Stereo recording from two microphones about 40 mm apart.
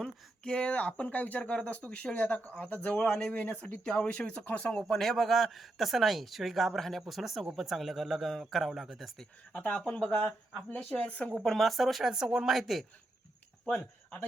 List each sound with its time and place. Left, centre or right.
0.0 s speech: left
1.0 s speech: left
3.1 s speech: centre
3.3 s speech: left
4.6 s speech: centre
4.9 s speech: centre
6.7 s speech: centre
7.0 s speech: centre
9.5 s speech: left
11.4 s speech: centre